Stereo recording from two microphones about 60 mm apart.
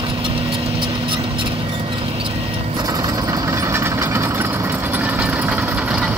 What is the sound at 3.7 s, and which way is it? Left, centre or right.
Engine, right.